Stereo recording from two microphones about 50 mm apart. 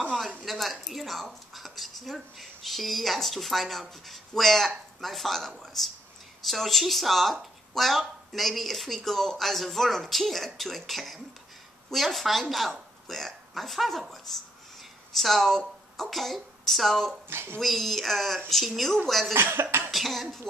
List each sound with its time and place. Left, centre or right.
0.5 s a woman's voice: centre
17.3 s speech: right
17.6 s a woman's voice: centre
19.3 s speech: right
19.9 s a woman's voice: centre